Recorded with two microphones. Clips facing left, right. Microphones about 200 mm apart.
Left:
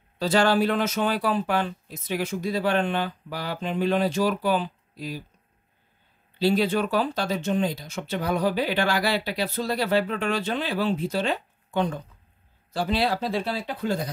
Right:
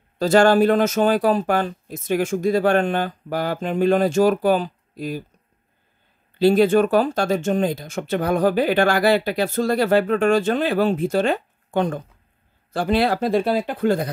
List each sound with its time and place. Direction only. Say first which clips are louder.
0.2 s speech: right 6 dB; 45° right (ahead or behind)
6.3 s speech: right 7 dB; 50° right (ahead or behind)